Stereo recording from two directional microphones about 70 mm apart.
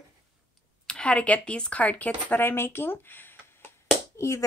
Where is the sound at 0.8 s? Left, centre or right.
Centre; by 3.3 s left.